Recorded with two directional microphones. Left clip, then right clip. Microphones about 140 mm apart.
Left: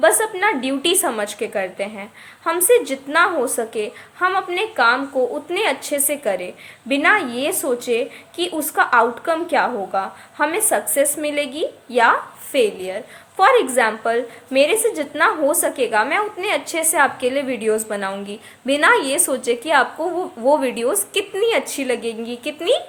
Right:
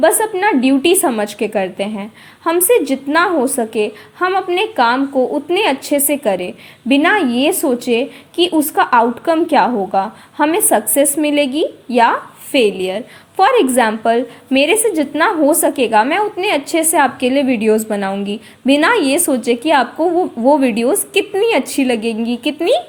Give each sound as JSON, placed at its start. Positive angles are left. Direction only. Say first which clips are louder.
{"t": 0.0, "sound": "a woman's voice", "louder": "right 3 dB", "side_deg": -20}